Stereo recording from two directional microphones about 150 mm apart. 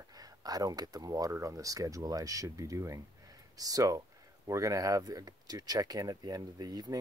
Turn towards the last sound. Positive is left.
turn(degrees=-25)  # may be behind; listen again after turning